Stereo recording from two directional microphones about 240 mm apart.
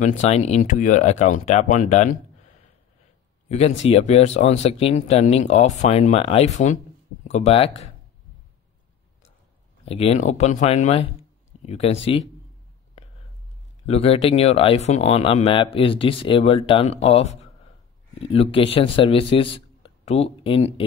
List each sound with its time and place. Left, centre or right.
0.0 s speech: left
3.4 s speech: left
9.8 s speech: left
13.8 s speech: left